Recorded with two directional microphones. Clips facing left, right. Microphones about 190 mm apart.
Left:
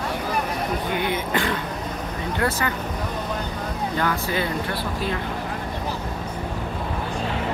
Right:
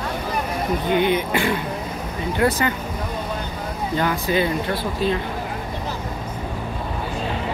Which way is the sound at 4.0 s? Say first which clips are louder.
Right 4 dB; 20° right (ahead or behind).